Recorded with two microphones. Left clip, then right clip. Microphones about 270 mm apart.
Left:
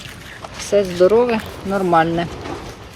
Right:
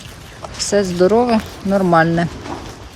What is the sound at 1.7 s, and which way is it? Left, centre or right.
Speech, right.